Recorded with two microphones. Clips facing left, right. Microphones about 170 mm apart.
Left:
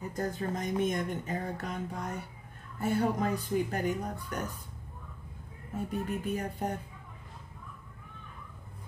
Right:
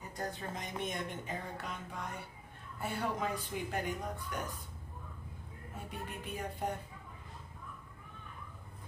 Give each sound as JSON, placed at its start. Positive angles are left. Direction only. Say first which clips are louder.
{"t": 0.1, "sound": "speech", "louder": "left 6 dB", "side_deg": 45}
{"t": 5.9, "sound": "speech", "louder": "left 10 dB", "side_deg": 45}